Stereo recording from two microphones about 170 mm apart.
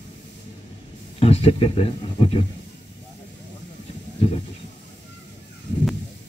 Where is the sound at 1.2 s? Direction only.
35° left (ahead or behind).